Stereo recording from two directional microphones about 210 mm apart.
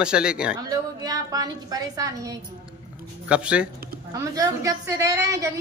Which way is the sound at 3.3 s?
5° right (ahead or behind).